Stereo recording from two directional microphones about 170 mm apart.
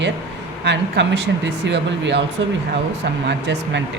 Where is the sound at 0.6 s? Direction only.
90° right.